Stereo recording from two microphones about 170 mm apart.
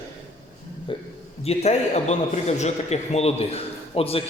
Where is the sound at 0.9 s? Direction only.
30° left (ahead or behind).